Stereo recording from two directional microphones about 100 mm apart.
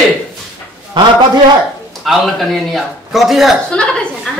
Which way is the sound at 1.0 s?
50° right (ahead or behind).